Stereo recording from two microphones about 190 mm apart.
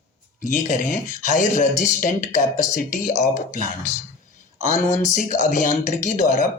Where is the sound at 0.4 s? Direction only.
45° left (ahead or behind).